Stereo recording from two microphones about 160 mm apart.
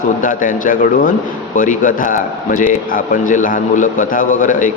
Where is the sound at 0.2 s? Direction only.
55° left (ahead or behind).